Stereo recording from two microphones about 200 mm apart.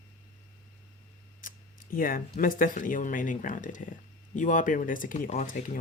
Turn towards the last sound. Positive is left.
turn(degrees=45)  # may be behind; listen again after turning